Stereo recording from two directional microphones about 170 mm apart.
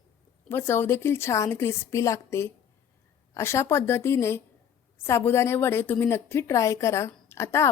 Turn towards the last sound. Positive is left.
turn(degrees=15)  # may be behind; listen again after turning